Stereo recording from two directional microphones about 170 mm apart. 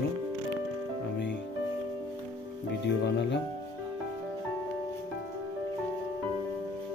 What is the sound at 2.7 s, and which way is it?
Speech, 90° left.